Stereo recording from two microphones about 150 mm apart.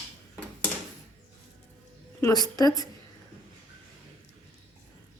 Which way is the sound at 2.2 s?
25° left (ahead or behind).